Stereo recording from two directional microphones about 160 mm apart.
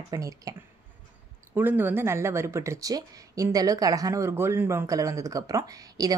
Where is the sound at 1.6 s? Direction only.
10° right (ahead or behind).